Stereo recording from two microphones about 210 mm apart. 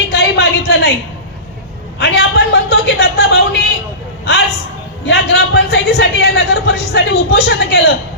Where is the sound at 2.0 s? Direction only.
50° left (ahead or behind).